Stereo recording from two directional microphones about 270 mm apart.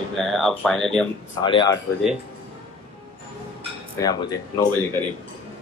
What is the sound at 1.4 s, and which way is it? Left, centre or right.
Speech, centre.